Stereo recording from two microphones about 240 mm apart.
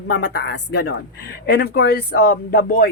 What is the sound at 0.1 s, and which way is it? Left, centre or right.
A woman's voice, left.